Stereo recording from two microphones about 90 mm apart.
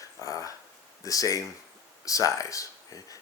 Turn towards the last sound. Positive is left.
turn(degrees=40)  # may be behind; listen again after turning